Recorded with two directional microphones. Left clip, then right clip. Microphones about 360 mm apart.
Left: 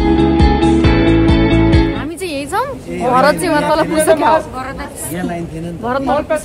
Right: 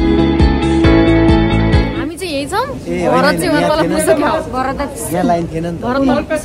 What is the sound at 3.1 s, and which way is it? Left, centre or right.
A woman's voice, centre.